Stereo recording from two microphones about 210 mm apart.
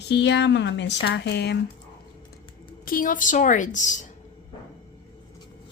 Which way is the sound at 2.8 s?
40° left (ahead or behind).